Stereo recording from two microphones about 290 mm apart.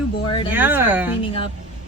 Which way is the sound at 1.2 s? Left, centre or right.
Centre.